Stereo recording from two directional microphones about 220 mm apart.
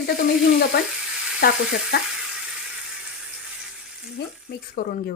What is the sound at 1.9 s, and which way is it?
Speech, 45° left (ahead or behind).